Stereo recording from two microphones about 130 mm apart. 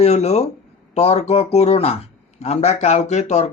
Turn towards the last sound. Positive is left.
turn(degrees=60)  # may be behind; listen again after turning